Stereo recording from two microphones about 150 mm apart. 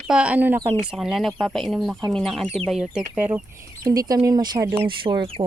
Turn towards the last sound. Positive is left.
turn(degrees=-35)  # may be behind; listen again after turning